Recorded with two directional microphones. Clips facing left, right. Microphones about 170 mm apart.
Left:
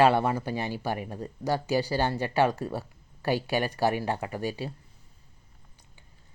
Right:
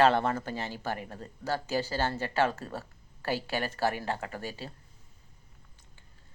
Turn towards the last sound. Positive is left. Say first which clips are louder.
# left 7 dB
turn(degrees=15)  # may be behind; listen again after turning